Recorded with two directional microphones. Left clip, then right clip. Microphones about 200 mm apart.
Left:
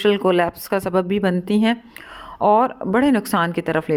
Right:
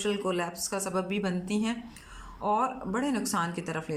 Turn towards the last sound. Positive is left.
turn(degrees=40)  # may be behind; listen again after turning